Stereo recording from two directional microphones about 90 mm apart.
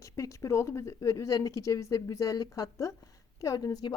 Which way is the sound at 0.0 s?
35° left (ahead or behind).